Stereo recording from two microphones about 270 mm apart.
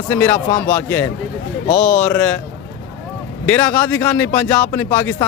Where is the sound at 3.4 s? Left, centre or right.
Centre.